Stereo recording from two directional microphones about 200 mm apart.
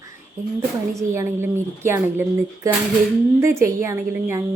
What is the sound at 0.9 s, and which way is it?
A woman's voice, 15° right (ahead or behind).